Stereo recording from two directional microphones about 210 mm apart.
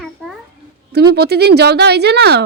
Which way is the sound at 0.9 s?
50° right (ahead or behind).